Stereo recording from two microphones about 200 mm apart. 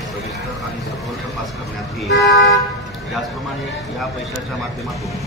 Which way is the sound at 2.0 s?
65° left (ahead or behind).